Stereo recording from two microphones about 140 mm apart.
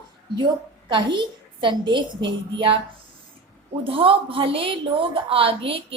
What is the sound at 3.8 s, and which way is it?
A woman's voice, 40° right (ahead or behind).